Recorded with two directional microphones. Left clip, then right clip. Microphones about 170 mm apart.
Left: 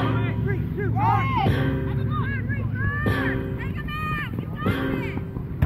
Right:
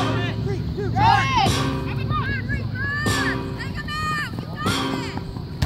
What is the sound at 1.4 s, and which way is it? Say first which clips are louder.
Music: right 4 dB; 75° right (ahead or behind).